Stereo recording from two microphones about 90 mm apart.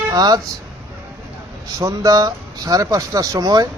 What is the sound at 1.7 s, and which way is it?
Speech, 40° right (ahead or behind).